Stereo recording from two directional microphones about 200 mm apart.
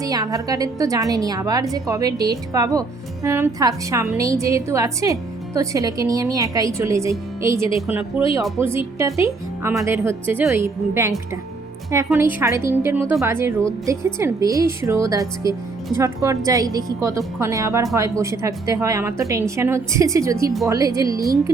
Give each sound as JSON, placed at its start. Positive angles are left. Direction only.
{"t": 0.0, "sound": "a woman's voice", "side_deg": -20}